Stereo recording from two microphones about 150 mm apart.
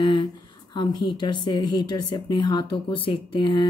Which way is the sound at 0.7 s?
30° left (ahead or behind).